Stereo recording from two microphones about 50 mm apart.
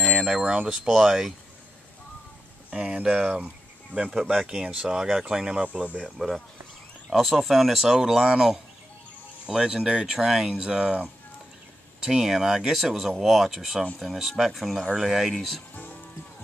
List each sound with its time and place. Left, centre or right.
0.1 s speech: centre
0.7 s speech: centre
2.7 s speech: right
3.3 s speech: right
3.9 s speech: right
4.2 s speech: centre; by 5.9 s right
6.0 s speech: centre
15.7 s music: left